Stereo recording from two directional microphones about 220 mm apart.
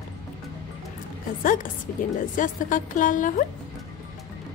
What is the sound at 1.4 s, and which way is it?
Speech, 35° left (ahead or behind).